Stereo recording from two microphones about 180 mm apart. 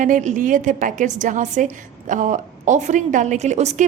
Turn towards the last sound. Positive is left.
turn(degrees=-40)  # may be behind; listen again after turning